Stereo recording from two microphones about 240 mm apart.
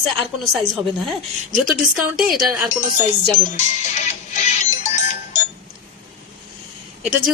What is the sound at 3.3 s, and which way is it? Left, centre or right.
Music, left.